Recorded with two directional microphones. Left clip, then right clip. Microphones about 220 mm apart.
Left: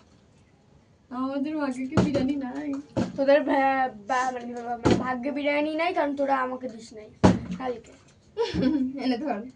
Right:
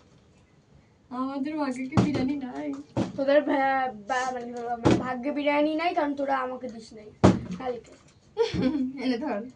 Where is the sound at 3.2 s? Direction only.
25° left (ahead or behind).